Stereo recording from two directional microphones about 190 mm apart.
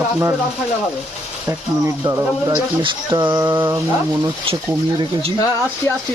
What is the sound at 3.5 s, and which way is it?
Speech, 10° right (ahead or behind).